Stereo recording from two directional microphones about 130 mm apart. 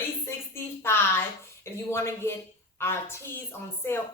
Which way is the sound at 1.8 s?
20° left (ahead or behind).